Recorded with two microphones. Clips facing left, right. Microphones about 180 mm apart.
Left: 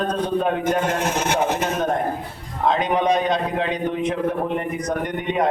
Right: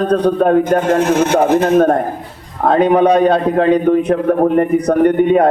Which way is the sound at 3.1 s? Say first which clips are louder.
Right 9 dB; 55° right (ahead or behind).